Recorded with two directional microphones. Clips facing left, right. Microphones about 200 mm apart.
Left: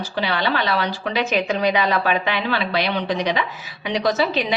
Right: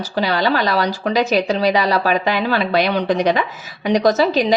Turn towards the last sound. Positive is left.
turn(degrees=-40)  # may be behind; listen again after turning